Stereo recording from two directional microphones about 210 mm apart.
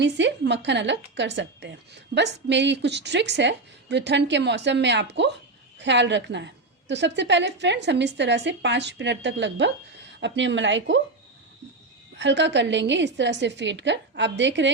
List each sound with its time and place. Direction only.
0.0 s a woman's voice: 60° right (ahead or behind)
12.1 s a woman's voice: 55° right (ahead or behind)